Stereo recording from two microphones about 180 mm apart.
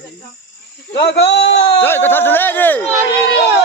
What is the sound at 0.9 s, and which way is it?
Speech, 70° left (ahead or behind).